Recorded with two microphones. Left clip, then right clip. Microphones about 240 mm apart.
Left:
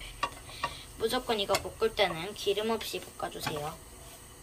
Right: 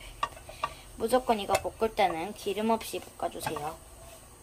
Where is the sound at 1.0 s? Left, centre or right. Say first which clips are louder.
Right 3 dB; right.